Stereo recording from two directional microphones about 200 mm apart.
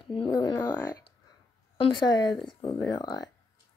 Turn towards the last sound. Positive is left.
turn(degrees=20)  # may be behind; listen again after turning